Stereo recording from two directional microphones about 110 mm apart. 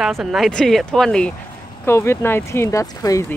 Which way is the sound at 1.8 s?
25° left (ahead or behind).